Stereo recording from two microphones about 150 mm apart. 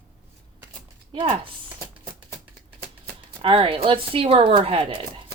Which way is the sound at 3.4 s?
35° right (ahead or behind).